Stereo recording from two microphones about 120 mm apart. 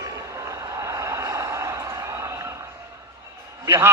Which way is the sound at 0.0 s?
30° right (ahead or behind).